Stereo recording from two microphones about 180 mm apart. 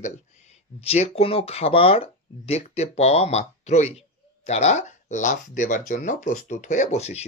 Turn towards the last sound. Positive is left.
turn(degrees=35)  # may be behind; listen again after turning